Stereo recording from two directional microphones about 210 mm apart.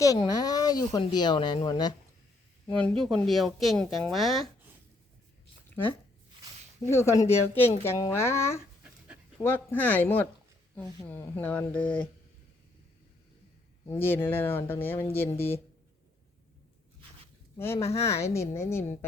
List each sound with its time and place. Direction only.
0.0 s speech: 15° left (ahead or behind)
2.6 s speech: 5° left (ahead or behind)
6.8 s speech: 15° left (ahead or behind)
13.9 s speech: 10° left (ahead or behind)
17.6 s speech: 10° left (ahead or behind)